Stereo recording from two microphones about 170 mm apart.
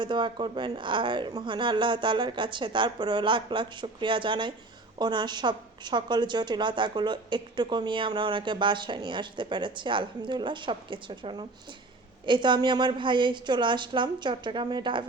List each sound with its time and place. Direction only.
0.0 s a woman's voice: 25° right (ahead or behind)